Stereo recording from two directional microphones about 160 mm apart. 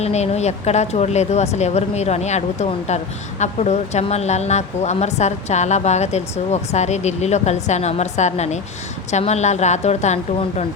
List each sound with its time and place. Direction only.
0.0 s speech: 45° left (ahead or behind)